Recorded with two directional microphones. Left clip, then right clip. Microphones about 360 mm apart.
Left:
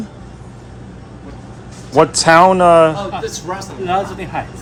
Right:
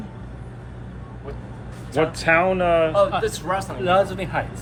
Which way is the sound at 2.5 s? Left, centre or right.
Centre.